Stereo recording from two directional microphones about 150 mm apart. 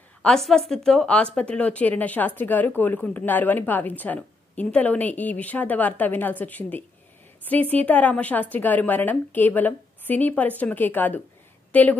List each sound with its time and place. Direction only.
0.2 s a woman's voice: 5° left (ahead or behind)